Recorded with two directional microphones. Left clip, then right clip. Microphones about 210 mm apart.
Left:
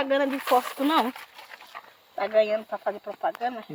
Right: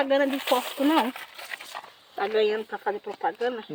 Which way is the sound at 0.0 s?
35° left (ahead or behind).